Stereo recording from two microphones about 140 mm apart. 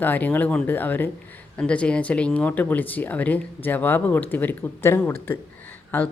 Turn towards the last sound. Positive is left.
turn(degrees=15)  # may be behind; listen again after turning